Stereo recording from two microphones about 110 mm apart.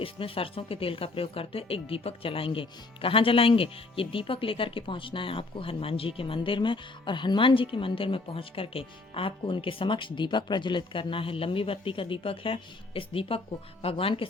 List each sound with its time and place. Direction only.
0.0 s speech: 55° left (ahead or behind)